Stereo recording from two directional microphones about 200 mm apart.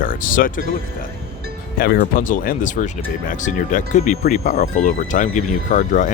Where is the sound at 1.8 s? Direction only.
50° left (ahead or behind).